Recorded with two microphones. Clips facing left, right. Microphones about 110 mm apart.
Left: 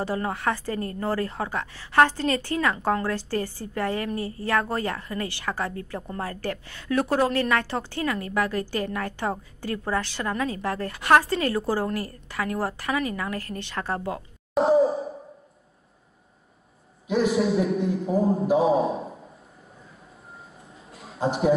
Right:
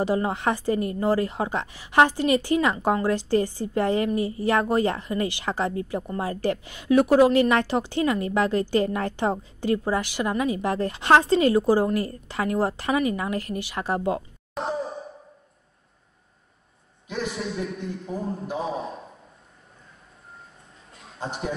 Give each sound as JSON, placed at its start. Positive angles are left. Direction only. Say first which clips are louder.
{"t": 0.0, "sound": "a woman's voice", "louder": "right 3 dB", "side_deg": -15}
{"t": 14.5, "sound": "sigh", "louder": "left 10 dB", "side_deg": 5}
{"t": 17.1, "sound": "a man's voice", "louder": "left 8 dB", "side_deg": 5}
{"t": 20.9, "sound": "a sound", "louder": "left 7 dB", "side_deg": 5}